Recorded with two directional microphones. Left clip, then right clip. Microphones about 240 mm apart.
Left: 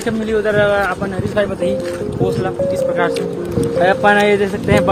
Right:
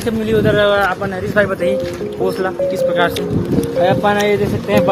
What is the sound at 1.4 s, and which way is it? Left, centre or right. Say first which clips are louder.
Speech: right 3 dB; right.